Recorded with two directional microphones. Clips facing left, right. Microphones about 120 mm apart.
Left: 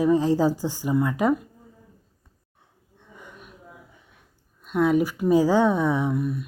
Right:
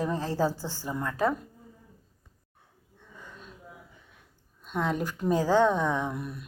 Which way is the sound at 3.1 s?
15° left (ahead or behind).